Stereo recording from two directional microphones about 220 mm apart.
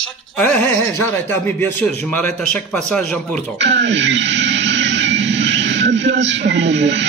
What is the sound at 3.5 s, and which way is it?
Speech, 55° right (ahead or behind).